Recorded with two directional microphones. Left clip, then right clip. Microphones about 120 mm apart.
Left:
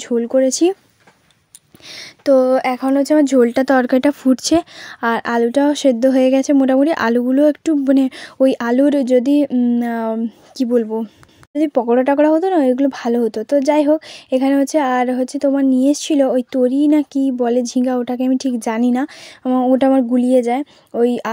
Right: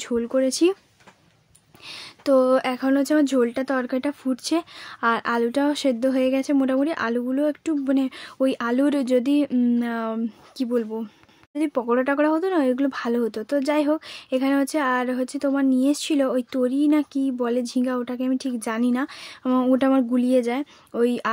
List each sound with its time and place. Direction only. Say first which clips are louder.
0.0 s speech: left 7 dB; 35° left (ahead or behind)
2.2 s speech: left 6 dB; 25° left (ahead or behind)
3.3 s a woman's voice: left 9 dB; 75° left (ahead or behind); by 8.8 s 45° left (ahead or behind)
8.8 s speech: left 7 dB; 30° left (ahead or behind)
9.5 s speech: left 5 dB; 20° left (ahead or behind)
9.8 s speech: left 6 dB; 40° left (ahead or behind)
19.4 s speech: left 6 dB; 15° left (ahead or behind)
19.8 s speech: left 6 dB; 25° left (ahead or behind)